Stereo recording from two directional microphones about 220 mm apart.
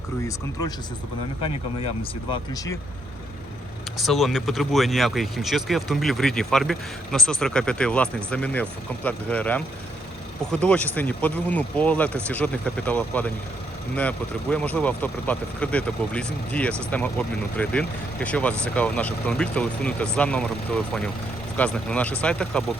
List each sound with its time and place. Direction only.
1.4 s speech: 25° left (ahead or behind)
3.9 s speech: centre (ahead or behind)
14.5 s speech: 5° left (ahead or behind)